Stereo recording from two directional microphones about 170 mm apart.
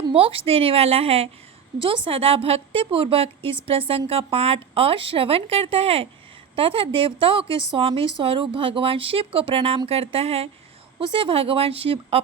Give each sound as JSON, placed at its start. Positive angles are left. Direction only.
{"t": 0.1, "sound": "a woman's voice", "side_deg": -35}